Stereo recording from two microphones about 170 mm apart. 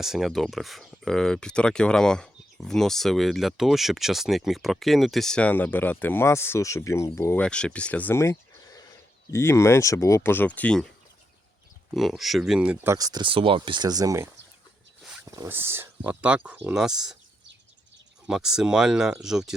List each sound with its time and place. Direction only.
0.0 s speech: centre (ahead or behind)
11.9 s speech: centre (ahead or behind)
18.3 s speech: 5° right (ahead or behind)